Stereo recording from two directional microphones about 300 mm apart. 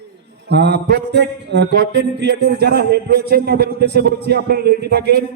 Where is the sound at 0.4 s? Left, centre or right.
Right.